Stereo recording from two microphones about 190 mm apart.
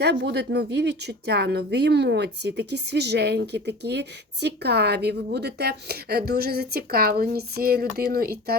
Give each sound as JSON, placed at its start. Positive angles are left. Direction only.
{"t": 0.0, "sound": "a woman's voice", "side_deg": -60}